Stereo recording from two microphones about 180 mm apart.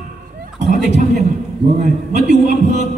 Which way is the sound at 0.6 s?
40° right (ahead or behind).